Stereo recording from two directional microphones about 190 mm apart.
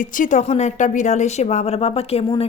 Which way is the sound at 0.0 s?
40° left (ahead or behind).